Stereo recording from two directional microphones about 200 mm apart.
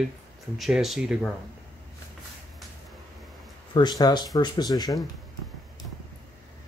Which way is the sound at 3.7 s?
20° left (ahead or behind).